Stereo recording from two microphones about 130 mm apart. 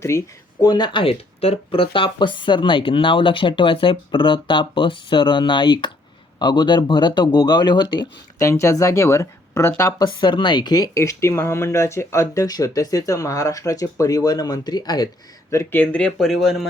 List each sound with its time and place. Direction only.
0.1 s speech: 20° left (ahead or behind)
0.6 s speech: 35° left (ahead or behind)
8.4 s speech: 25° left (ahead or behind)
10.2 s speech: 35° left (ahead or behind)
15.8 s speech: 10° left (ahead or behind)